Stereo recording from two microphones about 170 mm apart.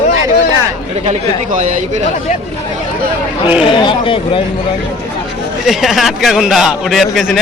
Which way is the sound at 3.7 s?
30° left (ahead or behind).